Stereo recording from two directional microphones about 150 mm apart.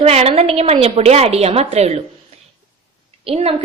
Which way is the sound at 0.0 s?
40° right (ahead or behind).